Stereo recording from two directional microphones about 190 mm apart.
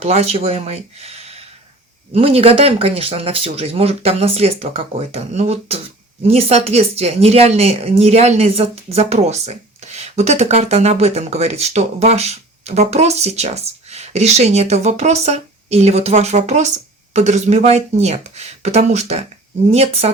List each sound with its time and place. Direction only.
0.0 s speech: 35° right (ahead or behind)